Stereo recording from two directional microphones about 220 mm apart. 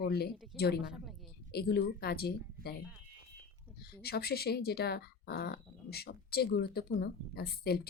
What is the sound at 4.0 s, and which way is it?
Speech, 45° left (ahead or behind).